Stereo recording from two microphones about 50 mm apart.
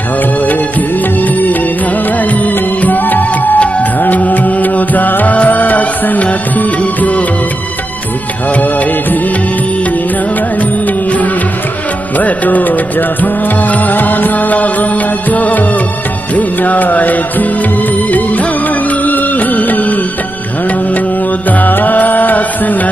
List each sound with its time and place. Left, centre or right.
2.3 s music: left
12.2 s music: left
19.0 s music: left
21.5 s music: left